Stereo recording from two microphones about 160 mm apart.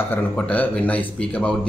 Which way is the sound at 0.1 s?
10° left (ahead or behind).